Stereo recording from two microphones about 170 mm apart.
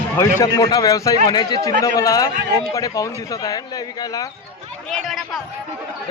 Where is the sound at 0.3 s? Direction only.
20° left (ahead or behind).